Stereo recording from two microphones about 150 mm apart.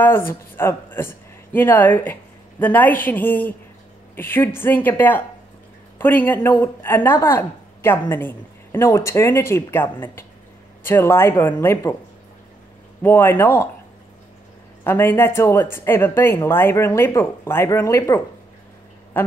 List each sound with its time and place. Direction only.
0.3 s speech: 15° left (ahead or behind)
13.0 s speech: 15° left (ahead or behind)
14.8 s speech: 15° left (ahead or behind)
19.1 s a sound: 10° left (ahead or behind)